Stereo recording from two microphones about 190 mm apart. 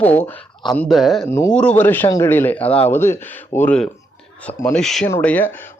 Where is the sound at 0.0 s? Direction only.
10° left (ahead or behind).